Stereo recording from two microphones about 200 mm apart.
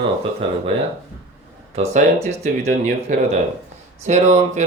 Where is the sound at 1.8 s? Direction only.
35° right (ahead or behind).